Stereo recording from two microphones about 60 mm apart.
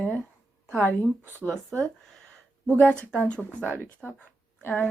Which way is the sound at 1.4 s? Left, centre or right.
Left.